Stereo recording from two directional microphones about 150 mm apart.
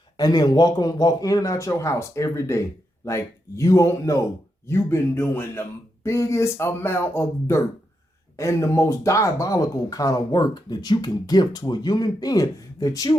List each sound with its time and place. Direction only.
0.2 s speech: 25° left (ahead or behind)